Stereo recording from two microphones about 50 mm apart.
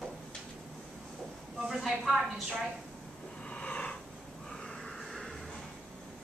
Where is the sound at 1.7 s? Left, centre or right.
Centre.